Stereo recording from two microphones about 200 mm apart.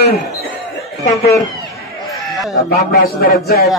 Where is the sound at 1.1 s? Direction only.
15° left (ahead or behind).